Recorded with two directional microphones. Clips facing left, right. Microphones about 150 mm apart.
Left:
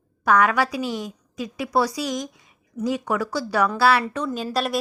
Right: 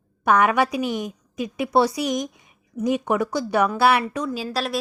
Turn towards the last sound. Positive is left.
turn(degrees=0)  # may be behind; listen again after turning